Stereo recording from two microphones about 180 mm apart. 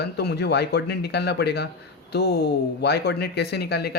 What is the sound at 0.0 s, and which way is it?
Speech, 65° left (ahead or behind).